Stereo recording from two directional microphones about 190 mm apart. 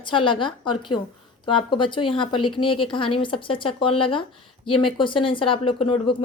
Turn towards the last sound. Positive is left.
turn(degrees=25)  # may be behind; listen again after turning